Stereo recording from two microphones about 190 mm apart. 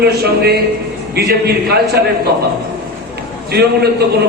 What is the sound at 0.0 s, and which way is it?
A man's voice, 55° right (ahead or behind).